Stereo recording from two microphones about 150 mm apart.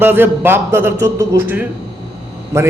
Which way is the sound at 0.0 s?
15° right (ahead or behind).